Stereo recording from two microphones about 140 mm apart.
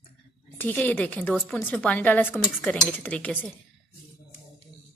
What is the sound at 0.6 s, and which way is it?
Speech, 15° left (ahead or behind).